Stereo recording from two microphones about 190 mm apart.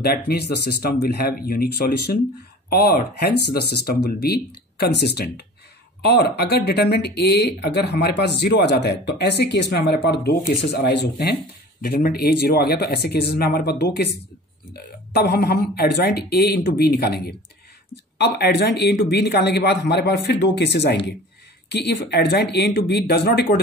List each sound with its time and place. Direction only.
0.0 s speech: 55° left (ahead or behind)
15.1 s speech: 60° left (ahead or behind)